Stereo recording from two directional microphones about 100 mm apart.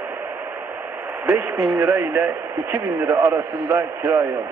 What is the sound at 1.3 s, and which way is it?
Speech, 15° right (ahead or behind).